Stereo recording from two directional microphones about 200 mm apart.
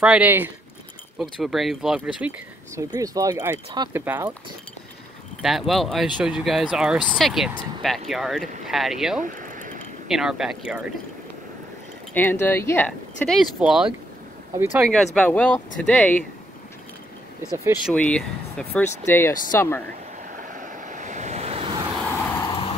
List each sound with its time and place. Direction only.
0.0 s speech: 5° right (ahead or behind)
5.4 s speech: centre (ahead or behind)
9.2 s a sound: 40° right (ahead or behind)
10.0 s speech: centre (ahead or behind)
12.1 s speech: 10° left (ahead or behind); by 14.9 s 10° right (ahead or behind)
15.1 s speech: 5° left (ahead or behind)
17.8 s speech: 5° left (ahead or behind)
20.3 s waves: 40° right (ahead or behind)
22.5 s vehicle: 25° left (ahead or behind)